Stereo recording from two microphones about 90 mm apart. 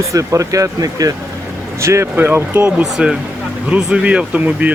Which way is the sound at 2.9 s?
10° right (ahead or behind).